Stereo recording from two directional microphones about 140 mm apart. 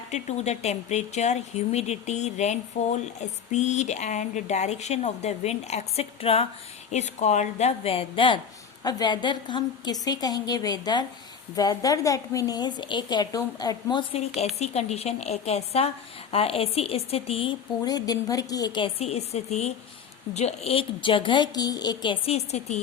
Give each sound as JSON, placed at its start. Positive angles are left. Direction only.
{"t": 0.1, "sound": "speech", "side_deg": 50}
{"t": 6.9, "sound": "a woman's voice", "side_deg": 55}
{"t": 14.1, "sound": "speech", "side_deg": 50}
{"t": 17.8, "sound": "a woman's voice", "side_deg": 25}
{"t": 18.9, "sound": "a woman's voice", "side_deg": 50}